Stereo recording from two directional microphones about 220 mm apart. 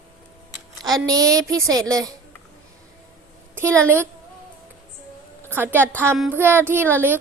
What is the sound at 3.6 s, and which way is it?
Speech, 10° right (ahead or behind).